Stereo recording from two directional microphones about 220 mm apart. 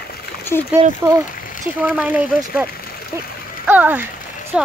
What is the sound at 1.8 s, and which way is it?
Speech, 5° right (ahead or behind).